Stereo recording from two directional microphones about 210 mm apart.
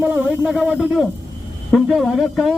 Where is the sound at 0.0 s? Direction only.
5° right (ahead or behind).